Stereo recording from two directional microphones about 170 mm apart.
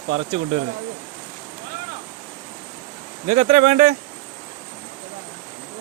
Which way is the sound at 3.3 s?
45° right (ahead or behind).